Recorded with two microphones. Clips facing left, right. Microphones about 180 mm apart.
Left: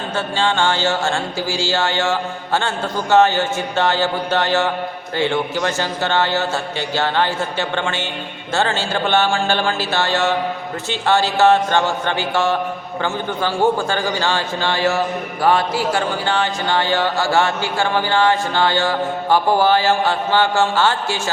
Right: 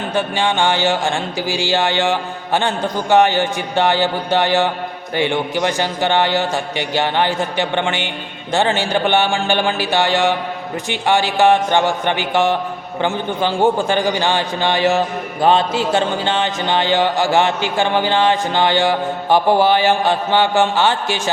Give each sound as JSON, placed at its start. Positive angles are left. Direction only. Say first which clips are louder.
{"t": 0.1, "sound": "a man's voice", "louder": "right 1 dB", "side_deg": -15}